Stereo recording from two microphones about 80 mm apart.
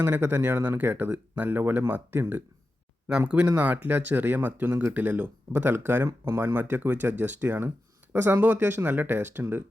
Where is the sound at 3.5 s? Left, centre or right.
Right.